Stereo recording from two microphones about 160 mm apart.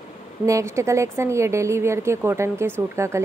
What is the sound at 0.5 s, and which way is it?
Speech, 20° right (ahead or behind).